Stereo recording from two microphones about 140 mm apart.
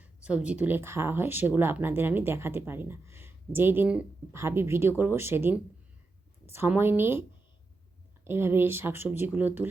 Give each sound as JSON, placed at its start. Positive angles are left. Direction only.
{"t": 0.0, "sound": "speech", "side_deg": -10}